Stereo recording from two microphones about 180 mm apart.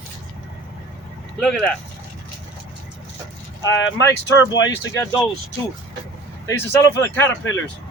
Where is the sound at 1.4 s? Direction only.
Centre (ahead or behind).